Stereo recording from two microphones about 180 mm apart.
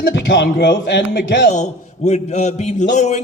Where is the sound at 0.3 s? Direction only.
75° left (ahead or behind); by 1.5 s 90° left.